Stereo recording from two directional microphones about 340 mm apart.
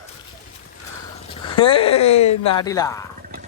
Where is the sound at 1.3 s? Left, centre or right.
Centre.